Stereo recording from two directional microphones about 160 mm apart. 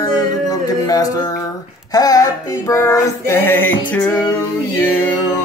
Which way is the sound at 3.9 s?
10° left (ahead or behind).